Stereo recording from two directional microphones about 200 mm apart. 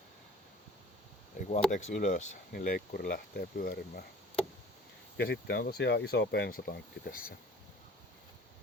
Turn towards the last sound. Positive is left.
turn(degrees=45)  # may be behind; listen again after turning